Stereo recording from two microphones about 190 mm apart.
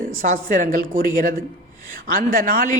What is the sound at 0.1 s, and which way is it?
A man's voice, 45° right (ahead or behind).